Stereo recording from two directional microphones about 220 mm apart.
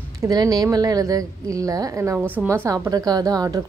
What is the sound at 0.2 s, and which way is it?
A woman's voice, 15° right (ahead or behind).